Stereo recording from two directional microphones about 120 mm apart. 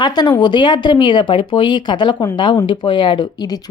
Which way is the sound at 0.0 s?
35° left (ahead or behind).